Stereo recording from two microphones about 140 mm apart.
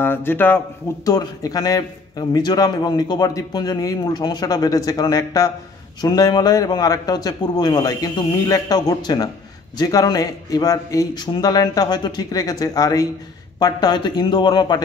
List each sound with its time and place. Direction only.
0.0 s speech: 15° left (ahead or behind)
1.0 s a man's voice: 25° left (ahead or behind)